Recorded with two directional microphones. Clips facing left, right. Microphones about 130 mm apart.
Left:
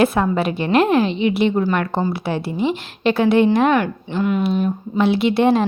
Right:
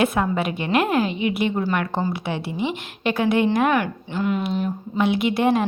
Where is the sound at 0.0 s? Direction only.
35° left (ahead or behind).